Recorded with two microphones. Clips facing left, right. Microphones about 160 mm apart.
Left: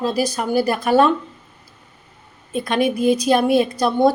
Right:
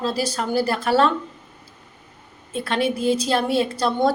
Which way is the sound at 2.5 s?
15° left (ahead or behind).